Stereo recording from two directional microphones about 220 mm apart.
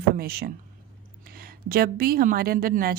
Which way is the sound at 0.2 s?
45° right (ahead or behind).